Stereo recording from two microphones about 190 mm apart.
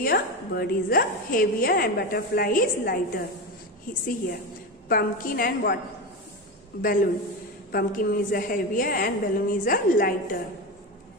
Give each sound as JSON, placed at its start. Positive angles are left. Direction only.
{"t": 0.0, "sound": "a woman's voice", "side_deg": 50}
{"t": 4.8, "sound": "a woman's voice", "side_deg": 50}
{"t": 6.8, "sound": "a woman's voice", "side_deg": 45}